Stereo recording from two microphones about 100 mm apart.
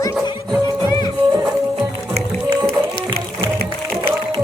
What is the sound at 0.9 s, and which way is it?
Music, 45° left (ahead or behind).